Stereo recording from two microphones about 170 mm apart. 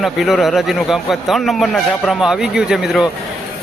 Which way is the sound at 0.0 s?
Centre (ahead or behind).